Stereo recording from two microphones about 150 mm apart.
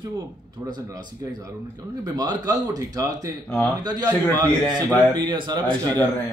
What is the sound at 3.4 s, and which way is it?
Speech, 10° left (ahead or behind).